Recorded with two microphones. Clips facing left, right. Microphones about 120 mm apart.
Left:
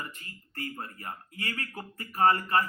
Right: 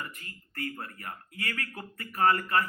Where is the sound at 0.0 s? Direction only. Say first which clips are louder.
Even; 30° left (ahead or behind).